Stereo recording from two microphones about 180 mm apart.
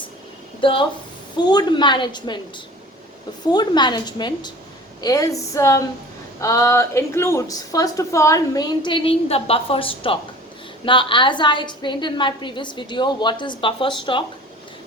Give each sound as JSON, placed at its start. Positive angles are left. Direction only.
{"t": 0.6, "sound": "a woman's voice", "side_deg": 30}
{"t": 3.4, "sound": "a woman's voice", "side_deg": 25}